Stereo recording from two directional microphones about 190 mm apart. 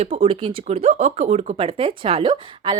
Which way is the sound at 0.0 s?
30° right (ahead or behind).